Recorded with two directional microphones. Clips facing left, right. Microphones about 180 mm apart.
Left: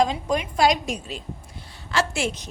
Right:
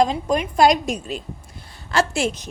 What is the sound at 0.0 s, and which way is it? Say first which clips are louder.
A woman's voice: right 3 dB; 40° right (ahead or behind).